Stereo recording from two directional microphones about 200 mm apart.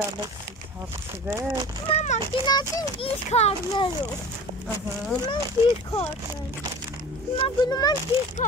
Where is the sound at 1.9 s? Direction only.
35° left (ahead or behind).